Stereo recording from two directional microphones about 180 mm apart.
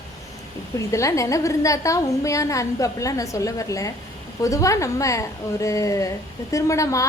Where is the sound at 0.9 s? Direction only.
15° left (ahead or behind).